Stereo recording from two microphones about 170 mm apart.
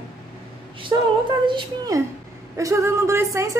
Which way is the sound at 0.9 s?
25° right (ahead or behind).